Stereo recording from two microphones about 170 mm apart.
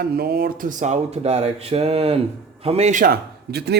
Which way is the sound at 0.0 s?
65° right (ahead or behind).